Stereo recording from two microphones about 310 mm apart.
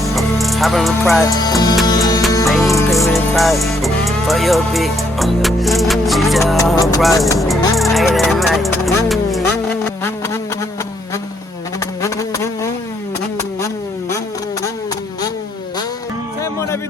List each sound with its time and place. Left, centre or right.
0.0 s music: centre
1.2 s speech: centre
1.9 s music: centre
7.0 s speech: centre
7.8 s music: centre
12.0 s insect: centre